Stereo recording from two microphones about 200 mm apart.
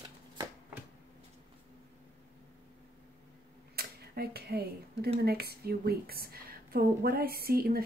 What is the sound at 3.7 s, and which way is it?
Speech, 50° right (ahead or behind).